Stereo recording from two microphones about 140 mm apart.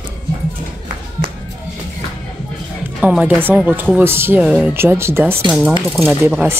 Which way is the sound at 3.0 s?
10° right (ahead or behind).